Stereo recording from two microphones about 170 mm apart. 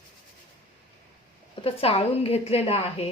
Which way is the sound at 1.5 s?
35° left (ahead or behind).